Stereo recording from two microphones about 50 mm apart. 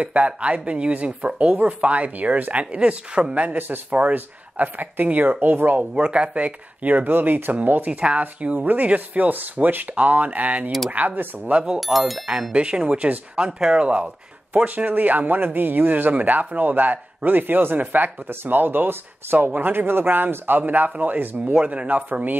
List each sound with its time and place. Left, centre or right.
0.0 s speech: right
2.6 s speech: right
3.5 s speech: right
5.9 s speech: centre
11.8 s speech: centre
12.5 s speech: right